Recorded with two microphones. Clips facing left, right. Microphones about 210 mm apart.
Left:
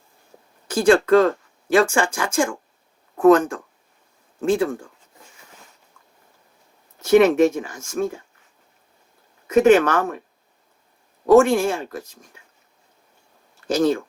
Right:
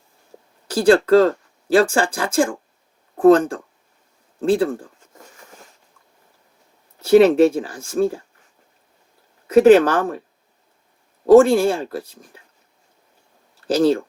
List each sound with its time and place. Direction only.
0.7 s speech: 35° right (ahead or behind)
7.0 s speech: 30° right (ahead or behind)
9.5 s speech: 35° right (ahead or behind)
11.3 s speech: 30° right (ahead or behind)
13.7 s speech: 35° right (ahead or behind)